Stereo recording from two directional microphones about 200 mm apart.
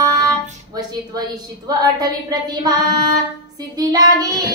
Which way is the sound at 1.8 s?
20° right (ahead or behind).